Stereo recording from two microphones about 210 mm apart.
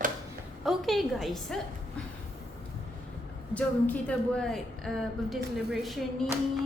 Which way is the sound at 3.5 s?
5° left (ahead or behind).